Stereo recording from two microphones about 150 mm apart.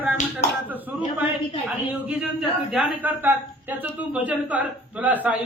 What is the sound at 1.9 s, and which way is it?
Speech, 10° right (ahead or behind).